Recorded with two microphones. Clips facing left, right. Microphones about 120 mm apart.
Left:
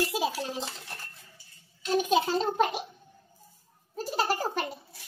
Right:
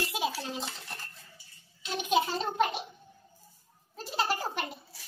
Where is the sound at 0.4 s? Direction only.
15° left (ahead or behind).